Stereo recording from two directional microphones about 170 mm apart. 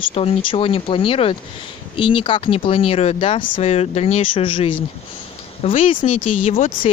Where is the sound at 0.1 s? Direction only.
35° left (ahead or behind).